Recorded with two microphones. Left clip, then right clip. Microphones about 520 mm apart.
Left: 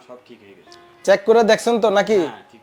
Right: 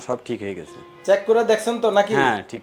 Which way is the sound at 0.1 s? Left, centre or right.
Right.